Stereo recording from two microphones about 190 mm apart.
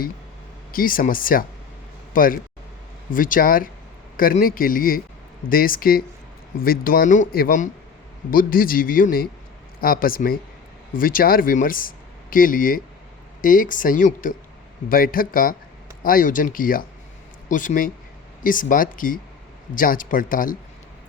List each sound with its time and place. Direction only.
0.7 s speech: 50° left (ahead or behind)